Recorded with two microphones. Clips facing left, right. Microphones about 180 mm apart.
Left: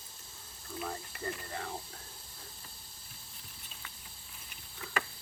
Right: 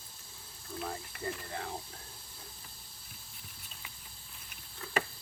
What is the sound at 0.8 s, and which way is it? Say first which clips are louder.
Speech: even; 5° right (ahead or behind).